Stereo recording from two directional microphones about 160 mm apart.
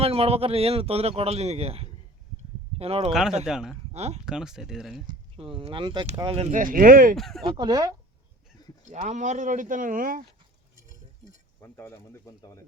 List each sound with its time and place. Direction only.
0.0 s speech: 40° right (ahead or behind)
3.1 s speech: 5° right (ahead or behind)
3.9 s speech: 40° right (ahead or behind)
4.3 s speech: 5° right (ahead or behind)
5.4 s speech: 35° right (ahead or behind)
6.2 s speech: 40° right (ahead or behind)
6.6 s speech: 60° right (ahead or behind)
7.2 s speech: centre (ahead or behind)
7.4 s speech: 30° right (ahead or behind)
8.9 s speech: 45° right (ahead or behind)
11.6 s speech: 15° left (ahead or behind)